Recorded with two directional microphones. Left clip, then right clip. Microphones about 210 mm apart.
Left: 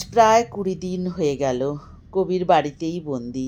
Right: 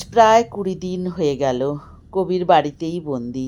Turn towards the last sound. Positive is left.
turn(degrees=-20)  # may be behind; listen again after turning